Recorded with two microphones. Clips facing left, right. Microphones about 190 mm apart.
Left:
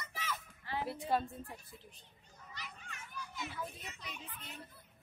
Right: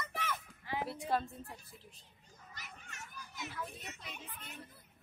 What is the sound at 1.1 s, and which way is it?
Speech, centre (ahead or behind).